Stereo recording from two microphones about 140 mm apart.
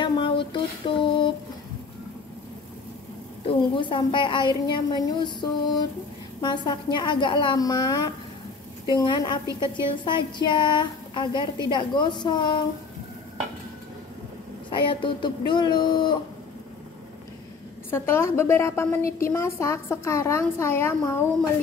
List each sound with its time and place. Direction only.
0.0 s a sound: 35° left (ahead or behind)
3.4 s speech: 35° left (ahead or behind)
14.7 s speech: 35° left (ahead or behind)
17.9 s a woman's voice: 20° left (ahead or behind)